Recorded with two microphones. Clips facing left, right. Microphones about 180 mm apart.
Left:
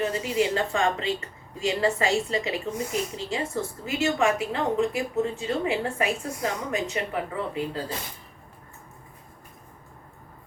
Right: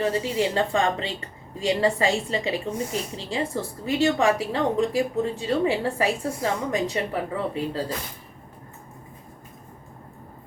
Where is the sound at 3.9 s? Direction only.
35° right (ahead or behind).